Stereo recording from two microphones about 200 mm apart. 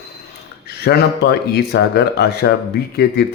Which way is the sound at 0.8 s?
55° left (ahead or behind).